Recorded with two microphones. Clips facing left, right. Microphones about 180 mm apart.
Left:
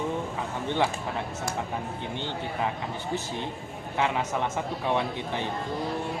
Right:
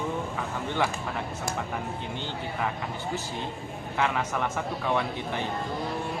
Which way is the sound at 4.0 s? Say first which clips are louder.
Left 1 dB; 20° left (ahead or behind).